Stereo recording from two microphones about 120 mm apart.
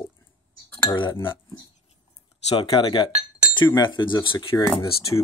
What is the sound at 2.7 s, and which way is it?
Speech, 45° left (ahead or behind).